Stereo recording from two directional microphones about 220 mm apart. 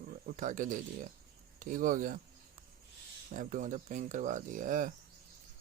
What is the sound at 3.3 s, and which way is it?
Speech, 35° right (ahead or behind).